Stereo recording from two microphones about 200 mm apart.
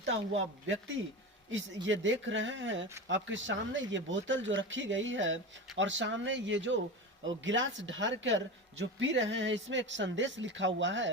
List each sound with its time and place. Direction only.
0.0 s speech: 70° right (ahead or behind)